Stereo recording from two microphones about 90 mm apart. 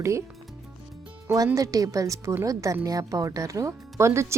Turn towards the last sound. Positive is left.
turn(degrees=-30)  # may be behind; listen again after turning